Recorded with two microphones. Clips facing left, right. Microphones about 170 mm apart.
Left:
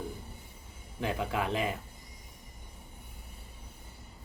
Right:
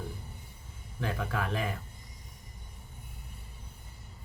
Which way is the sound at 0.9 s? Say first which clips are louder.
Left 2 dB; 20° left (ahead or behind).